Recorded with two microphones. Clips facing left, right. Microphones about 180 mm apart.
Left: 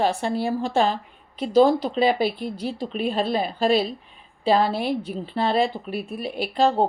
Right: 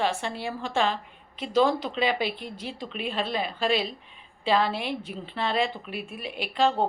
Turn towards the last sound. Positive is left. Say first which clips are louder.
# left 4 dB
turn(degrees=40)  # may be behind; listen again after turning